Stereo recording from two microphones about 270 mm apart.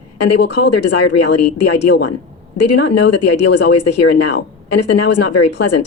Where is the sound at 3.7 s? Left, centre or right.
Left.